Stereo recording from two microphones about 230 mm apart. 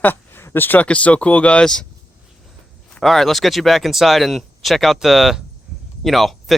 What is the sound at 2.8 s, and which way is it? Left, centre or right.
Speech, centre.